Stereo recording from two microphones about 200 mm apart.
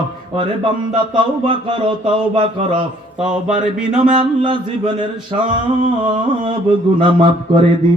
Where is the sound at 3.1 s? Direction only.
5° right (ahead or behind).